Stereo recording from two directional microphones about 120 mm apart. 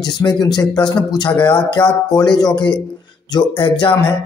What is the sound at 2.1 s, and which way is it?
Speech, 35° left (ahead or behind).